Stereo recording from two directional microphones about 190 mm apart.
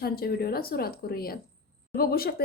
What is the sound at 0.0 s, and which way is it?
Speech, 55° left (ahead or behind).